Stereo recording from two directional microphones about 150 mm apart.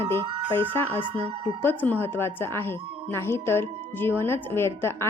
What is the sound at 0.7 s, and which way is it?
Speech, 15° left (ahead or behind).